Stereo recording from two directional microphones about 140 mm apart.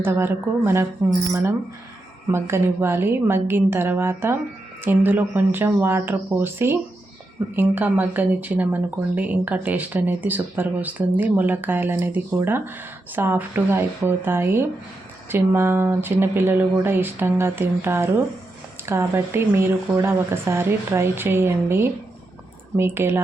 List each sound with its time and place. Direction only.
0.0 s speech: 15° right (ahead or behind)